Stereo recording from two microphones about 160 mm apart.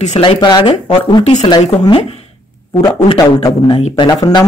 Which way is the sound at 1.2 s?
45° left (ahead or behind).